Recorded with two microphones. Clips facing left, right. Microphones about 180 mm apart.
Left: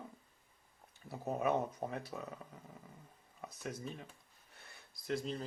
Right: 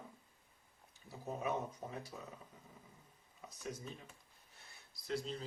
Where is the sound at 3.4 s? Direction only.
60° left (ahead or behind).